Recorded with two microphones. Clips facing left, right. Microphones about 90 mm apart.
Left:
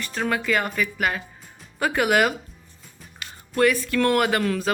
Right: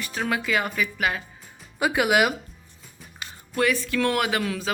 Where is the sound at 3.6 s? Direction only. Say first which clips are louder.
Left 3 dB; centre (ahead or behind).